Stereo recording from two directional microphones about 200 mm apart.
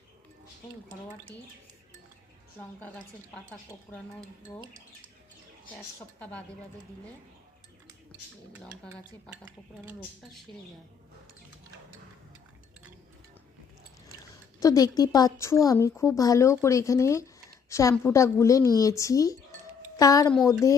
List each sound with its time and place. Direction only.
2.8 s a woman's voice: 5° left (ahead or behind)
5.7 s speech: 5° left (ahead or behind)
8.6 s speech: 5° left (ahead or behind)
14.6 s a woman's voice: 15° left (ahead or behind)
17.7 s a sound: 15° left (ahead or behind)
17.9 s a woman's voice: 15° left (ahead or behind)